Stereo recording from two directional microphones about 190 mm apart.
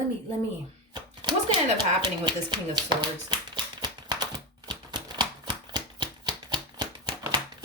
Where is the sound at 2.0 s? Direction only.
20° right (ahead or behind).